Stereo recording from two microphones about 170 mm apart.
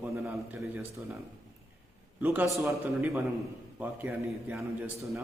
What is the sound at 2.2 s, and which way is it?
A man's voice, 10° right (ahead or behind).